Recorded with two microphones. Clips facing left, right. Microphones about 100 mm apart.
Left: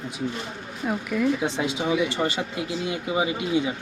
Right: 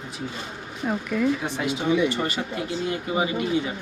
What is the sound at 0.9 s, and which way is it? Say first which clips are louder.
Speech: even; centre (ahead or behind).